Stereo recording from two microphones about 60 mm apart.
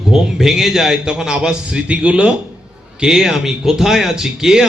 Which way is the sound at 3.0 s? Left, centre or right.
Centre.